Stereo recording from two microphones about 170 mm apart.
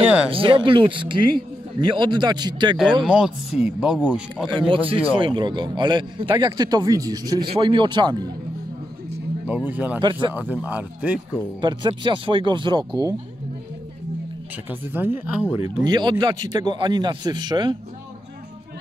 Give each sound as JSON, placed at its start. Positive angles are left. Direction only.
{"t": 0.0, "sound": "a sound", "side_deg": -5}
{"t": 0.3, "sound": "a man's voice", "side_deg": -30}
{"t": 3.0, "sound": "speech", "side_deg": -5}
{"t": 4.5, "sound": "a man's voice", "side_deg": -30}
{"t": 9.7, "sound": "speech", "side_deg": -10}
{"t": 11.6, "sound": "a man's voice", "side_deg": -30}
{"t": 14.7, "sound": "speech", "side_deg": -10}
{"t": 15.5, "sound": "a man's voice", "side_deg": -20}